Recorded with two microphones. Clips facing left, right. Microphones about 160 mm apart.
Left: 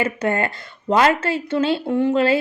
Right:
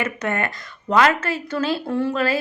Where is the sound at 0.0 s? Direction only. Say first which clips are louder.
Left 3 dB; 30° left (ahead or behind).